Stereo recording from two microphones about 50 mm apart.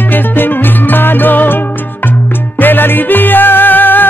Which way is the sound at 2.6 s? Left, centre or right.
Left.